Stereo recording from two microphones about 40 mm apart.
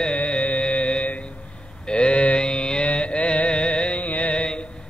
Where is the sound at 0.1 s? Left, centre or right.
Left.